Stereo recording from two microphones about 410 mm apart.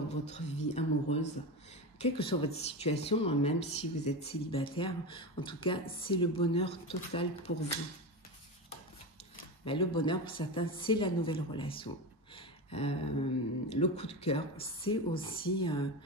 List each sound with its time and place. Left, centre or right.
0.3 s speech: centre
9.7 s speech: centre